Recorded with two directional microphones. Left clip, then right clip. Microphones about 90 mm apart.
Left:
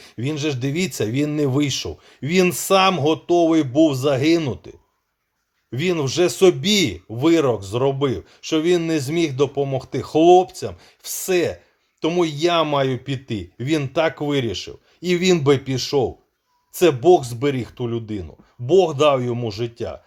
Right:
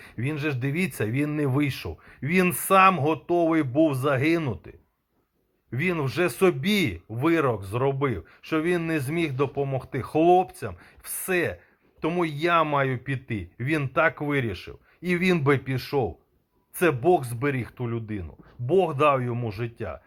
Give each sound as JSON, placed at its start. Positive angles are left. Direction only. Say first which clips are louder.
{"t": 0.0, "sound": "speech", "louder": "left 5 dB", "side_deg": 35}
{"t": 2.9, "sound": "speech", "louder": "left 6 dB", "side_deg": 45}
{"t": 5.7, "sound": "speech", "louder": "left 6 dB", "side_deg": 35}